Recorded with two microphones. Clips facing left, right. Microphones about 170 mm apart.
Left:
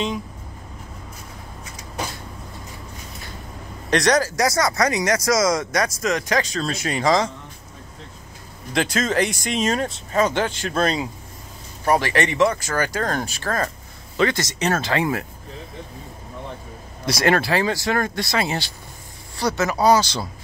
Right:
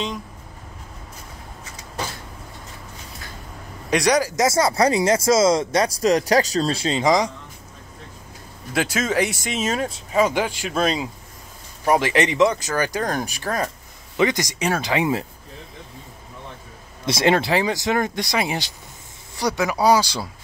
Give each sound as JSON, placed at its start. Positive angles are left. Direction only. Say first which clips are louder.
{"t": 3.9, "sound": "speech", "louder": "even", "side_deg": -10}
{"t": 4.5, "sound": "speech", "louder": "right 2 dB", "side_deg": -30}
{"t": 8.7, "sound": "speech", "louder": "even", "side_deg": -10}
{"t": 11.9, "sound": "speech", "louder": "right 1 dB", "side_deg": -20}
{"t": 17.0, "sound": "speech", "louder": "right 1 dB", "side_deg": -20}